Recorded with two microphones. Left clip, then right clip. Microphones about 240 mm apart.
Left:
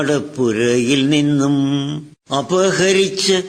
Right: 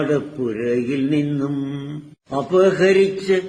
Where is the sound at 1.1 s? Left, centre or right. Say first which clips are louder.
Left 6 dB; left.